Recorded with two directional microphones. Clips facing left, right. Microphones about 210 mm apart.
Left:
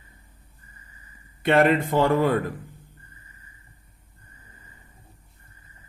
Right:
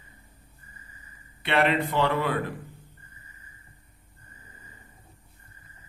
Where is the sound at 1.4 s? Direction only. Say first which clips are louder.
Left 5 dB; 45° left (ahead or behind).